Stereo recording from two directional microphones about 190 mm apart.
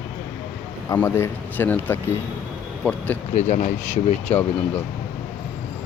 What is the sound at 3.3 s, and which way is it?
Speech, 40° left (ahead or behind).